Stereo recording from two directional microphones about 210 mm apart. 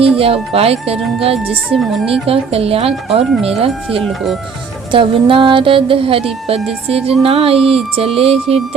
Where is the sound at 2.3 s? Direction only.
30° right (ahead or behind).